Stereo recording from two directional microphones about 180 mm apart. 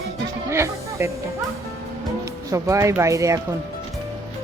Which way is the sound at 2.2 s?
15° right (ahead or behind).